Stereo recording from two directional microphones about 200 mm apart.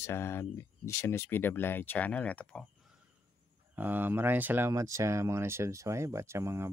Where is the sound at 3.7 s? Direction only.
10° right (ahead or behind).